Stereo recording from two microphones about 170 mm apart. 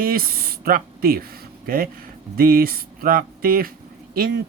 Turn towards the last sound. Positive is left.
turn(degrees=-60)  # may be behind; listen again after turning